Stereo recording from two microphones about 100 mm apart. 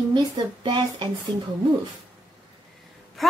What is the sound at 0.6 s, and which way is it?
Speech, 50° right (ahead or behind).